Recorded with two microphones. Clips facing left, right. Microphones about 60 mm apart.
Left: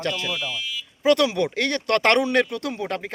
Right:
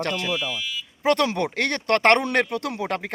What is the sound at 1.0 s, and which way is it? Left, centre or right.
Speech, right.